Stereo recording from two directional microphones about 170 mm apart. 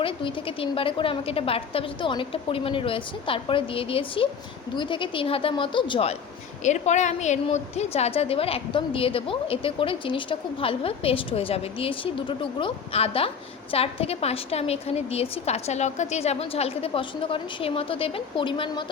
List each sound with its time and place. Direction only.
0.0 s a woman's voice: 30° left (ahead or behind)
6.7 s a woman's voice: 45° left (ahead or behind)